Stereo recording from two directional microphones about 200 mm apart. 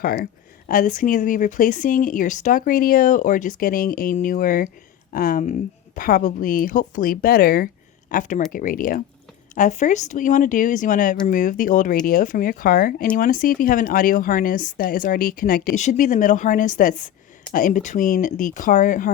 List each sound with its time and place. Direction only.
0.0 s speech: 45° left (ahead or behind)